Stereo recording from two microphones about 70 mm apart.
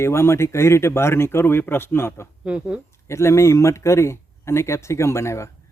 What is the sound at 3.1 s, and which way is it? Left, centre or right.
Speech, left.